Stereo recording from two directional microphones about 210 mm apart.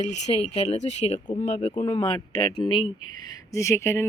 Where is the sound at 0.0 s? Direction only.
35° left (ahead or behind).